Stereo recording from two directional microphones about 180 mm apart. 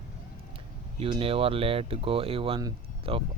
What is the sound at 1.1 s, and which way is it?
Speech, 30° right (ahead or behind).